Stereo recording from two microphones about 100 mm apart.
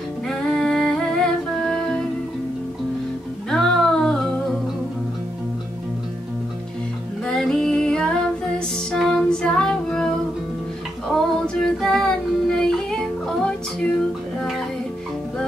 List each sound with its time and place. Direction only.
0.3 s music: 5° left (ahead or behind)
3.4 s music: 5° left (ahead or behind)
7.2 s music: 5° left (ahead or behind)
11.1 s female singing: 5° left (ahead or behind)